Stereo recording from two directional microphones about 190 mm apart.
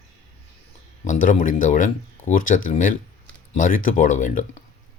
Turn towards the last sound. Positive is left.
turn(degrees=40)  # may be behind; listen again after turning